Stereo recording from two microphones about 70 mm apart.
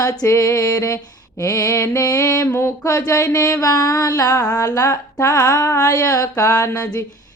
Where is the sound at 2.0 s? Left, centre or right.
Left.